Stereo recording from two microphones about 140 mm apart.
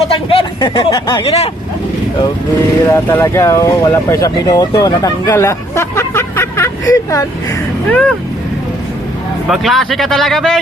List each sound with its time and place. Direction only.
0.1 s a sound: 40° left (ahead or behind)
0.6 s speech: 35° left (ahead or behind)
2.9 s speech: 20° left (ahead or behind)
7.9 s speech: 10° left (ahead or behind)
9.5 s speech: centre (ahead or behind)